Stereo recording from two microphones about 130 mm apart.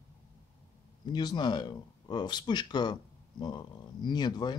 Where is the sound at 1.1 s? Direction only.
35° left (ahead or behind).